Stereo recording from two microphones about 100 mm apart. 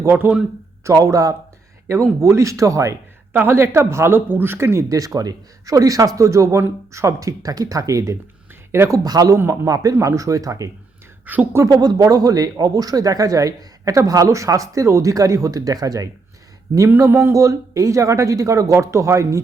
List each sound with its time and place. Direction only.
0.0 s speech: 20° right (ahead or behind)
0.9 s speech: 35° right (ahead or behind)
9.0 s speech: 35° right (ahead or behind)
11.3 s a woman's voice: 15° right (ahead or behind)
11.6 s speech: 40° right (ahead or behind)
17.0 s speech: 30° right (ahead or behind)